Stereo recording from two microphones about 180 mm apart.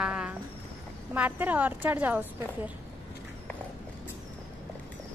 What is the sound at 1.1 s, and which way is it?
A woman's voice, 10° right (ahead or behind).